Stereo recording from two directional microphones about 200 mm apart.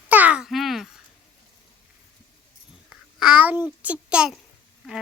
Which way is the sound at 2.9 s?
5° right (ahead or behind).